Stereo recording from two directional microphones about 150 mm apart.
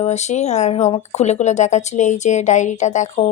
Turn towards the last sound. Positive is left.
turn(degrees=50)  # may be behind; listen again after turning